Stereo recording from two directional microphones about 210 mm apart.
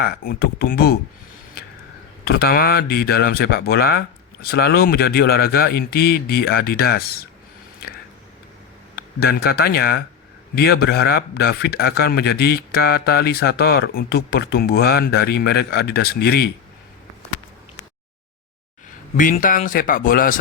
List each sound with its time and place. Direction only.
0.0 s a man's voice: 45° left (ahead or behind)
2.2 s a man's voice: 50° left (ahead or behind)
9.2 s a man's voice: 50° left (ahead or behind)
19.1 s speech: 40° left (ahead or behind)